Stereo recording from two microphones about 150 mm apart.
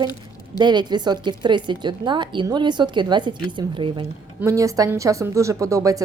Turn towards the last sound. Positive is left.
turn(degrees=-20)  # may be behind; listen again after turning